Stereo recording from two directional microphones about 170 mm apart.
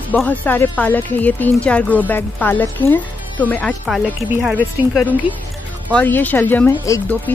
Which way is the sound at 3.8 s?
5° right (ahead or behind).